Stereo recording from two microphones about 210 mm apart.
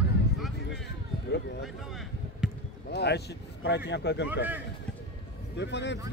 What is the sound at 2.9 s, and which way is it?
Speech, 50° left (ahead or behind).